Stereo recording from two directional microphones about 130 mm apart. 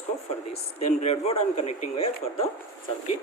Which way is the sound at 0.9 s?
60° left (ahead or behind).